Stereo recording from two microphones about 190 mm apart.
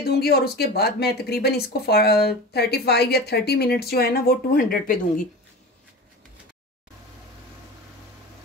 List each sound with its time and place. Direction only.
0.0 s speech: 55° left (ahead or behind)